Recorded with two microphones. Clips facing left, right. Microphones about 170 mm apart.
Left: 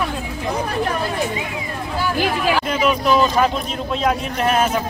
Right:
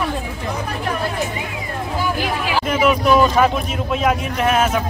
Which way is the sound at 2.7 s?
5° right (ahead or behind).